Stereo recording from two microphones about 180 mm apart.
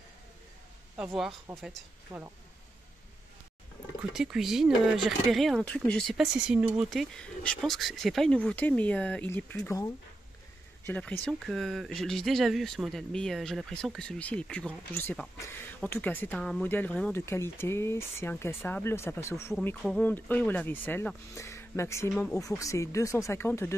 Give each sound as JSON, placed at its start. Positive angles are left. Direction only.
{"t": 0.9, "sound": "speech", "side_deg": -5}
{"t": 2.1, "sound": "speech", "side_deg": -15}
{"t": 4.1, "sound": "speech", "side_deg": 0}
{"t": 10.9, "sound": "speech", "side_deg": 5}